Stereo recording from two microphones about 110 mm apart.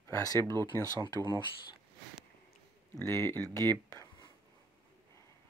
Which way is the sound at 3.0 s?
25° left (ahead or behind).